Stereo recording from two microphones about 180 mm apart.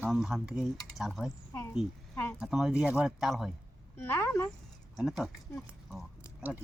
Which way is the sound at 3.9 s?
15° left (ahead or behind).